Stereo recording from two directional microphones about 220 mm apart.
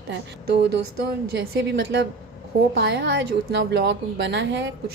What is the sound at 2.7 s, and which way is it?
Speech, 50° right (ahead or behind).